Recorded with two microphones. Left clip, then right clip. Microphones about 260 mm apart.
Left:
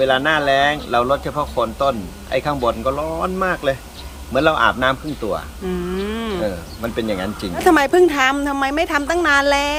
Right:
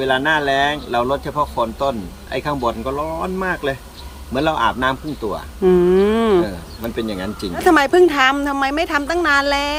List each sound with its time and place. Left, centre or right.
0.0 s speech: centre
5.6 s speech: right
6.8 s speech: centre
7.5 s speech: centre